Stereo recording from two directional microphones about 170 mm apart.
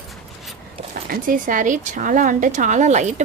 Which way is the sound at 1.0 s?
55° right (ahead or behind).